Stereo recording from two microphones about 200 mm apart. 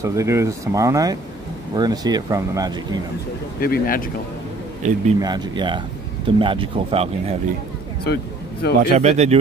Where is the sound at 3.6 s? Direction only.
45° left (ahead or behind).